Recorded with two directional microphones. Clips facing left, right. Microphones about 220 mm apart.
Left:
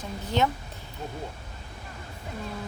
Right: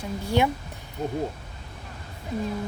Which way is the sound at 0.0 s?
10° right (ahead or behind).